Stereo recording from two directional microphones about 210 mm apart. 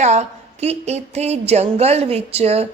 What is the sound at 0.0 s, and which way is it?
A woman's voice, 30° right (ahead or behind).